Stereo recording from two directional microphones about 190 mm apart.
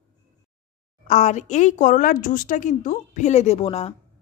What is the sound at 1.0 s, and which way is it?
A woman's voice, 40° left (ahead or behind).